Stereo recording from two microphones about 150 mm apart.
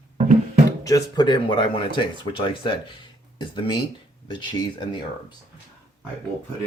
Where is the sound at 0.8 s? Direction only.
25° left (ahead or behind).